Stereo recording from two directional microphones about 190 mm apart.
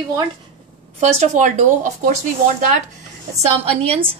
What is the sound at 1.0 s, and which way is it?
Speech, 35° right (ahead or behind).